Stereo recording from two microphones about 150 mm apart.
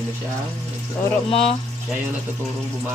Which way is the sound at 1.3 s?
40° left (ahead or behind).